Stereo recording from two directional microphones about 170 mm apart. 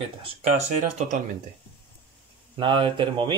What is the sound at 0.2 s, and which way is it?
Speech, 40° right (ahead or behind).